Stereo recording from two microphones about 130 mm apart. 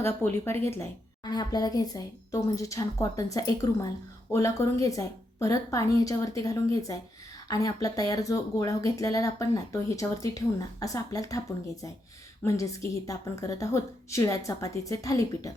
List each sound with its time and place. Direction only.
0.0 s a woman's voice: 20° left (ahead or behind)
1.2 s a woman's voice: 30° left (ahead or behind)
12.5 s a woman's voice: 25° left (ahead or behind)